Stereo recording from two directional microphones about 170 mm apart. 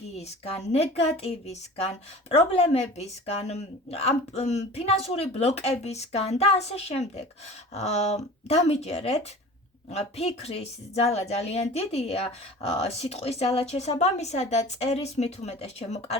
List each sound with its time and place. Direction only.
0.2 s speech: 40° left (ahead or behind)